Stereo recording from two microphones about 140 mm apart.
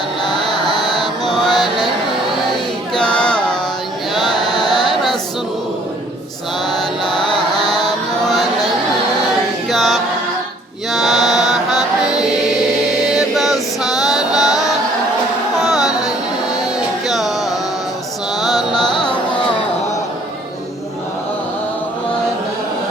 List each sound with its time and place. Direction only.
0.3 s a sound: 30° left (ahead or behind)
0.9 s music: centre (ahead or behind)
2.9 s a sound: 5° left (ahead or behind)
4.8 s choir: centre (ahead or behind)
7.9 s music: centre (ahead or behind)
9.6 s a capella: centre (ahead or behind)
10.9 s chant: centre (ahead or behind)
13.1 s music: centre (ahead or behind)
15.6 s carnatic music: centre (ahead or behind)
17.1 s music: centre (ahead or behind)
19.0 s carnatic music: 10° left (ahead or behind)